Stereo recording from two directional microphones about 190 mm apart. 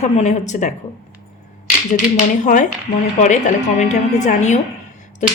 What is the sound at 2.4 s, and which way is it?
A woman's voice, 40° left (ahead or behind).